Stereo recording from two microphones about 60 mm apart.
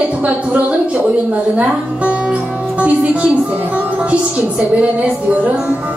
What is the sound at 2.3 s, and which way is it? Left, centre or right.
Music, right.